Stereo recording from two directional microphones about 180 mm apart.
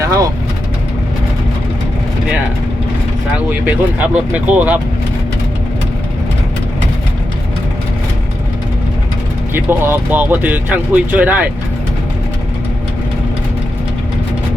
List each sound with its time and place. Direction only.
0.0 s speech: 20° right (ahead or behind)
3.3 s speech: 10° right (ahead or behind)
9.5 s speech: 10° right (ahead or behind)